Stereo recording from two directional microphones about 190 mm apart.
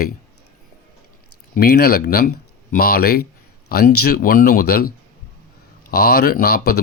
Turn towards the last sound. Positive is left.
turn(degrees=55)  # may be behind; listen again after turning